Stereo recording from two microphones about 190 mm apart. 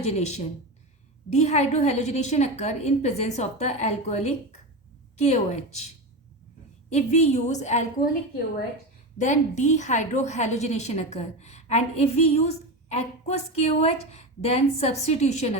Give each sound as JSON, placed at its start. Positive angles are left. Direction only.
{"t": 0.0, "sound": "a woman's voice", "side_deg": 35}
{"t": 6.9, "sound": "a woman's voice", "side_deg": 35}
{"t": 9.1, "sound": "a woman's voice", "side_deg": 40}